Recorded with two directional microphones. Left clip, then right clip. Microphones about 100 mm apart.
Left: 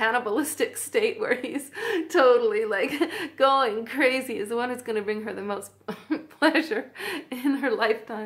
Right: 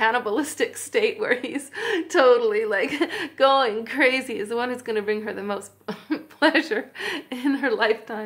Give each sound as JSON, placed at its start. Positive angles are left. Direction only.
{"t": 0.0, "sound": "a woman's voice", "side_deg": -20}